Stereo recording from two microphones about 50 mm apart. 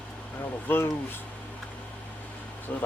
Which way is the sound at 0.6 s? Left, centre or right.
Left.